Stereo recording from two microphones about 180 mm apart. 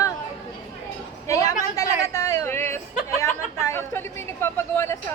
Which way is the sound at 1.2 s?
20° left (ahead or behind).